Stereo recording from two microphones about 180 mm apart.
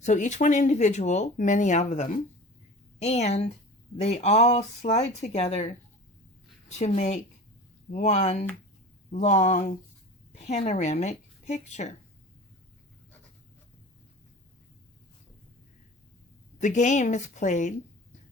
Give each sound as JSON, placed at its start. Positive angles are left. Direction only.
{"t": 0.0, "sound": "speech", "side_deg": 40}
{"t": 16.6, "sound": "a woman's voice", "side_deg": 40}